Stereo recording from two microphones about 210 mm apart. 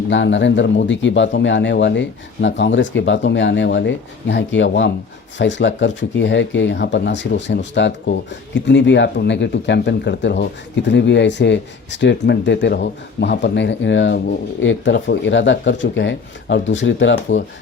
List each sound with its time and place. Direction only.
0.1 s speech: 60° left (ahead or behind)